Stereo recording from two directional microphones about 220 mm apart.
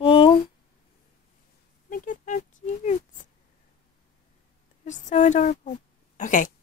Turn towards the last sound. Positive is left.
turn(degrees=35)  # may be behind; listen again after turning